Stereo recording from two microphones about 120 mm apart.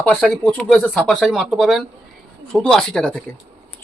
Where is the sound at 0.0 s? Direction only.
10° left (ahead or behind).